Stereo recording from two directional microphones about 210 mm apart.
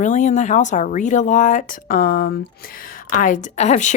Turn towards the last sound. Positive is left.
turn(degrees=35)  # may be behind; listen again after turning